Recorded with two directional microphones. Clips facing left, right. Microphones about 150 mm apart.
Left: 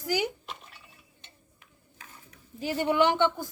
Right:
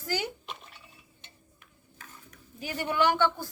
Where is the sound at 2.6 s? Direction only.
25° left (ahead or behind).